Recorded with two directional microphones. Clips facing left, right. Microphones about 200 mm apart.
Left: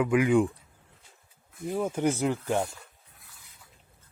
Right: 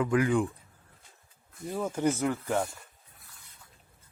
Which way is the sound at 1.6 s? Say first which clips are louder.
Left 2 dB; 15° left (ahead or behind).